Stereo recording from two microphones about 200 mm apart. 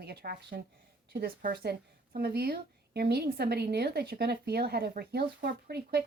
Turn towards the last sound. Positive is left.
turn(degrees=-50)  # may be behind; listen again after turning